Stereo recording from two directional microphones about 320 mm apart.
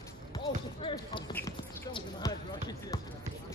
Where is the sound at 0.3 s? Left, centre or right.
Centre.